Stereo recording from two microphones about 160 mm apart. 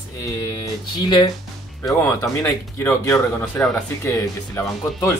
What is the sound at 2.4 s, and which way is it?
Speech, 15° left (ahead or behind).